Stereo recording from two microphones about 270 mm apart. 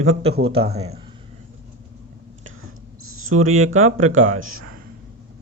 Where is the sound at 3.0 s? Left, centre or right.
Right.